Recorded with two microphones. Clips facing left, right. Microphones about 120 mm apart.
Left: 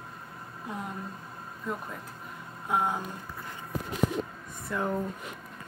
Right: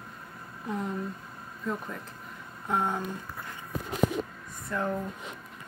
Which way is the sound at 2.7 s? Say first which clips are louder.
Even; 5° left (ahead or behind).